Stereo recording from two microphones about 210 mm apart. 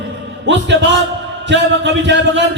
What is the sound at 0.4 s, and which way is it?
A man's voice, 60° right (ahead or behind).